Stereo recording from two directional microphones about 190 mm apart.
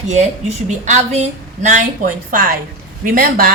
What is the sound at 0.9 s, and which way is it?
A woman's voice, 35° right (ahead or behind).